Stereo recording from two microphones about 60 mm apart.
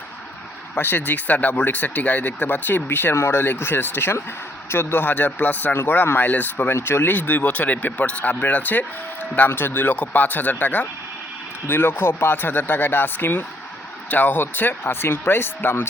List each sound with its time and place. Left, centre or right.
0.8 s speech: left
6.7 s speech: left